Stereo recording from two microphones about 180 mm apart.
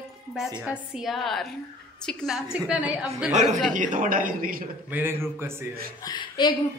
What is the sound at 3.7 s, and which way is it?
Speech, 45° right (ahead or behind).